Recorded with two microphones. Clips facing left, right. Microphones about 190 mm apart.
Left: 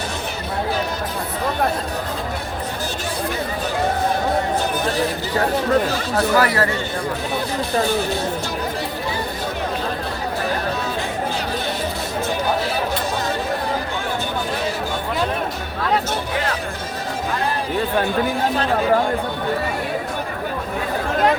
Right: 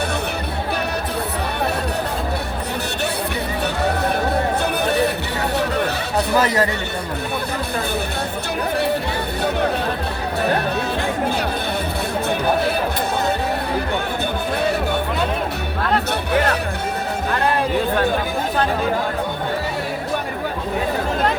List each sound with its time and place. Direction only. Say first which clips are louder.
4.8 s chatter: right 3 dB; 65° right (ahead or behind)
5.5 s a sound: left 1 dB; 65° right (ahead or behind)
6.3 s a man's voice: right 1 dB; 20° right (ahead or behind)
16.3 s music: right 8 dB; 65° right (ahead or behind)